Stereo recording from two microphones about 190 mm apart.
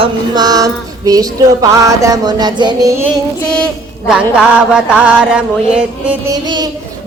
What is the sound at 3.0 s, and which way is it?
Mantra, 5° left (ahead or behind).